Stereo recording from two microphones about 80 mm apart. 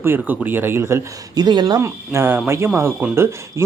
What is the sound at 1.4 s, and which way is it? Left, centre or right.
Speech, right.